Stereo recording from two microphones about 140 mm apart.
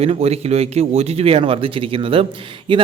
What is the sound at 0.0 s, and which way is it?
A man's voice, 50° right (ahead or behind).